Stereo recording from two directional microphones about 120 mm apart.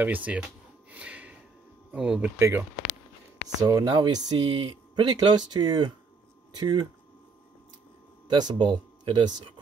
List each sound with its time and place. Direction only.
0.0 s speech: 15° right (ahead or behind)
0.9 s snort: 10° right (ahead or behind)
1.9 s speech: 10° right (ahead or behind)
2.3 s speech: 20° right (ahead or behind)
3.6 s speech: 30° right (ahead or behind)
8.3 s speech: 40° right (ahead or behind)